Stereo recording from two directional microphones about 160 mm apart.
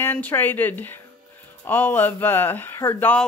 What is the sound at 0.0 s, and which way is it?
Speech, 15° left (ahead or behind).